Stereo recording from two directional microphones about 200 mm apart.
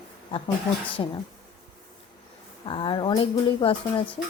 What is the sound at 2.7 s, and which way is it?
Speech, 25° left (ahead or behind).